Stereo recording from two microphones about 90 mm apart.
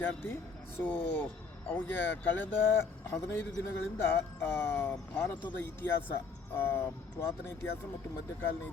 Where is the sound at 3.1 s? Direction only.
30° left (ahead or behind).